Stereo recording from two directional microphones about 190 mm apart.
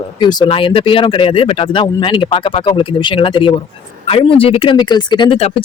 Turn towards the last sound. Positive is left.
turn(degrees=30)  # may be behind; listen again after turning